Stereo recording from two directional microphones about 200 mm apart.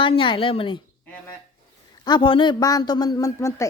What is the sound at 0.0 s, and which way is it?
Speech, 25° left (ahead or behind).